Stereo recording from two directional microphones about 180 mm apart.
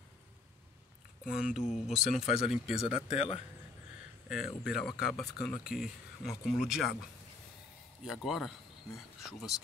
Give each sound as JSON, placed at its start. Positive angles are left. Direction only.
{"t": 1.2, "sound": "speech", "side_deg": 40}
{"t": 1.7, "sound": "speech", "side_deg": -5}
{"t": 3.1, "sound": "speech", "side_deg": 35}
{"t": 4.3, "sound": "speech", "side_deg": -5}
{"t": 8.0, "sound": "speech", "side_deg": 0}